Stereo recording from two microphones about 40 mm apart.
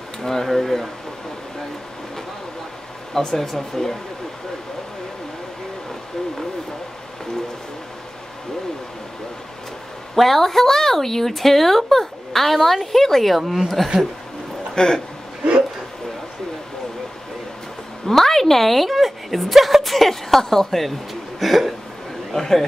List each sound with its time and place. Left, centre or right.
0.2 s speech: centre
3.2 s speech: centre
10.1 s a woman's voice: centre
14.8 s speech: centre
18.0 s a woman's voice: centre
22.3 s speech: centre